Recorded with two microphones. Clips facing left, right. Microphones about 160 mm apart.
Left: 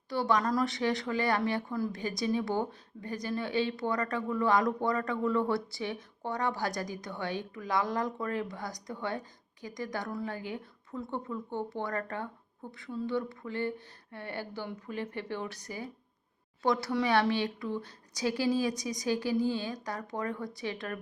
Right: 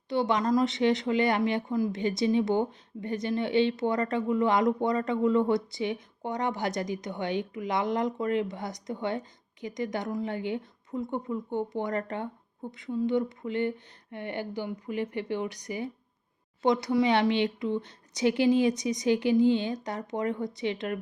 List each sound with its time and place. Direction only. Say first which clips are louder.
0.1 s speech: right 3 dB; 20° right (ahead or behind)